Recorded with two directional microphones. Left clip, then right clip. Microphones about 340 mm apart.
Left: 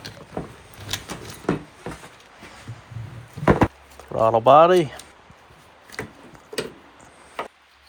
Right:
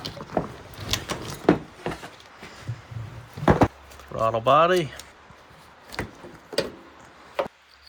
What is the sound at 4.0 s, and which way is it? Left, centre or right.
Speech, centre.